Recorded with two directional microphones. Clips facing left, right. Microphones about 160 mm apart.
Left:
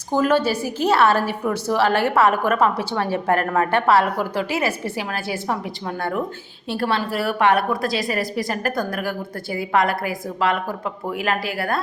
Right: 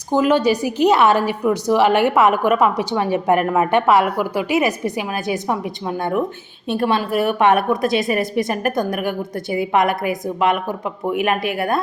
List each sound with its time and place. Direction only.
0.1 s a woman's voice: 15° right (ahead or behind)